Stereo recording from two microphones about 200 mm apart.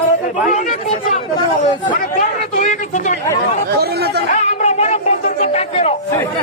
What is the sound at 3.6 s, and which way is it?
Speech, 55° right (ahead or behind).